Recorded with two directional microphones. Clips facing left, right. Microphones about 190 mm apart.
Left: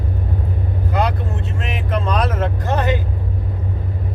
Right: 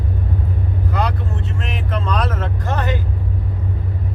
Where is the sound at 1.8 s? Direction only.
15° left (ahead or behind).